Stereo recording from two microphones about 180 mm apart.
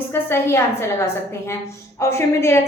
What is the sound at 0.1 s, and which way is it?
Speech, 15° left (ahead or behind).